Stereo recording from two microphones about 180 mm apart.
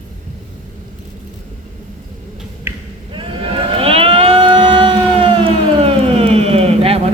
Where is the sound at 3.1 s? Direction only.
30° right (ahead or behind).